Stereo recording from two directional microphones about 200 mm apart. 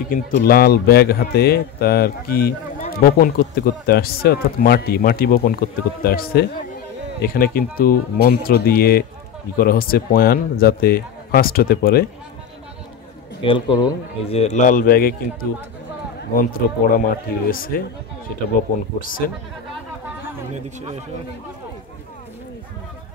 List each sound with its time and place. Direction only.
0.1 s speech: 45° left (ahead or behind)
13.4 s speech: 25° left (ahead or behind)
14.4 s speech: 35° left (ahead or behind)
16.2 s speech: 45° left (ahead or behind)
18.9 s speech: 45° left (ahead or behind)